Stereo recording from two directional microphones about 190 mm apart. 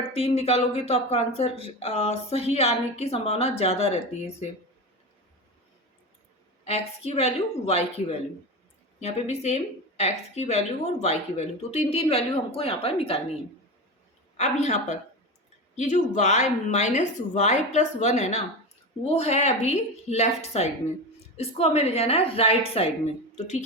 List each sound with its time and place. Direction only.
0.1 s speech: 35° left (ahead or behind)
6.7 s speech: 35° left (ahead or behind)
14.3 s speech: 35° left (ahead or behind)